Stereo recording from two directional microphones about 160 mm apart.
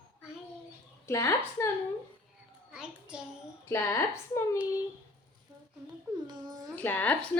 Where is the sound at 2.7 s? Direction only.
5° right (ahead or behind).